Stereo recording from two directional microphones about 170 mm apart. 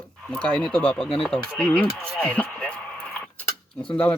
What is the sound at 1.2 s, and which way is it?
Speech, 5° left (ahead or behind).